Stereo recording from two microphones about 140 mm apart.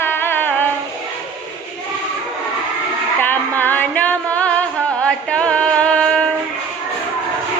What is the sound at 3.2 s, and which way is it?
Music, 15° left (ahead or behind).